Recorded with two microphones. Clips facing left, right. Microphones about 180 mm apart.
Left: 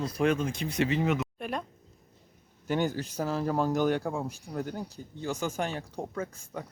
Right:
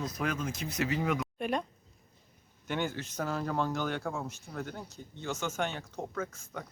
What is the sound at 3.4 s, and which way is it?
Speech, 10° left (ahead or behind).